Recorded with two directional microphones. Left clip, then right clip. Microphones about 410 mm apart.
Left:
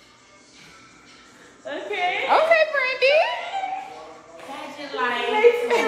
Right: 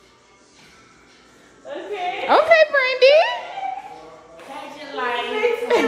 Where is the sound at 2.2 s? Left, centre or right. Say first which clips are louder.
Right 4 dB; right.